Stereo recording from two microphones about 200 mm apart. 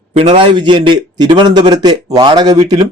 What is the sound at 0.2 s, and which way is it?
A man's voice, 30° right (ahead or behind).